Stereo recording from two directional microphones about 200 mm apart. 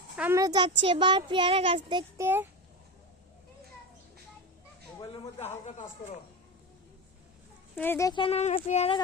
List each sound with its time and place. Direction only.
0.2 s a child's voice: 15° right (ahead or behind)
2.2 s a child's voice: 10° right (ahead or behind)
4.9 s a sound: 20° left (ahead or behind)
7.8 s speech: 10° left (ahead or behind); by 9.0 s 35° left (ahead or behind)